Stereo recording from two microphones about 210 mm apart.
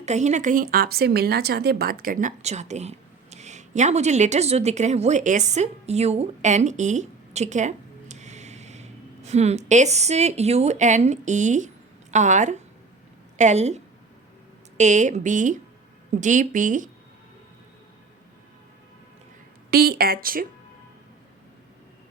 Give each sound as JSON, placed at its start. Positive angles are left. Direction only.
{"t": 0.0, "sound": "a woman's voice", "side_deg": -35}
{"t": 19.7, "sound": "speech", "side_deg": -45}